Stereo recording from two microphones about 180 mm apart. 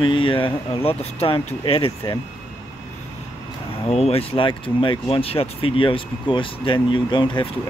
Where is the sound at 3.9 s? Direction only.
35° left (ahead or behind).